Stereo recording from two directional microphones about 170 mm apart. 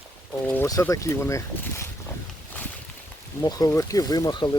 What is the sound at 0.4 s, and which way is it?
Speech, 10° left (ahead or behind).